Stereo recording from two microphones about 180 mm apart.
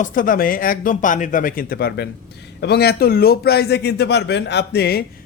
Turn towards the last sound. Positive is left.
turn(degrees=65)  # may be behind; listen again after turning